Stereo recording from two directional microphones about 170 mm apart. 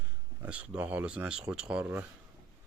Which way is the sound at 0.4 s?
10° right (ahead or behind).